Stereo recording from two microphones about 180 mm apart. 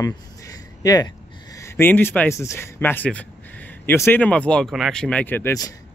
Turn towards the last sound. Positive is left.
turn(degrees=15)  # may be behind; listen again after turning